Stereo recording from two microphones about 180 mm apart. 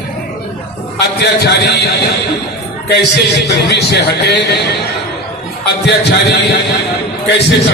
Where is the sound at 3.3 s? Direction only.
65° left (ahead or behind).